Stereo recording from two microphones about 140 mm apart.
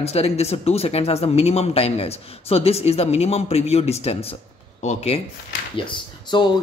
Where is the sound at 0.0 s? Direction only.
50° left (ahead or behind).